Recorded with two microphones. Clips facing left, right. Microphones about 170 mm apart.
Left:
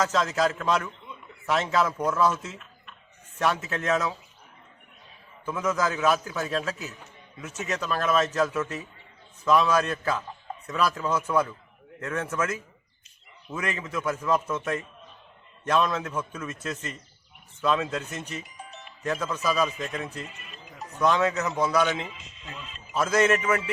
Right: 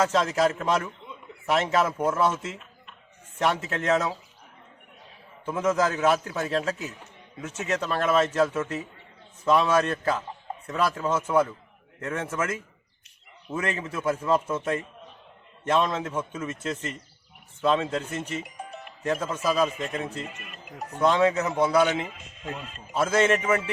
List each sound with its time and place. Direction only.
0.0 s a man's voice: 25° right (ahead or behind)
5.5 s a man's voice: 30° right (ahead or behind)
18.5 s music: 50° right (ahead or behind)
19.0 s a man's voice: 25° right (ahead or behind)
20.4 s speech: 55° right (ahead or behind)
21.0 s a man's voice: 25° right (ahead or behind)
22.0 s speech: 50° right (ahead or behind)
23.0 s a man's voice: 25° right (ahead or behind)